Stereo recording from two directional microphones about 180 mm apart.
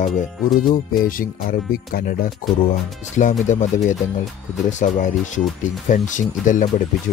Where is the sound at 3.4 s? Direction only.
45° left (ahead or behind).